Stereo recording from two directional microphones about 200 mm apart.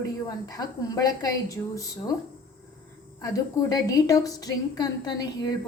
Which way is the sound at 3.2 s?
20° left (ahead or behind).